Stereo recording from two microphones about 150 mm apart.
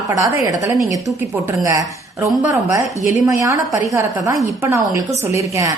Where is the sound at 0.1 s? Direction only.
20° right (ahead or behind).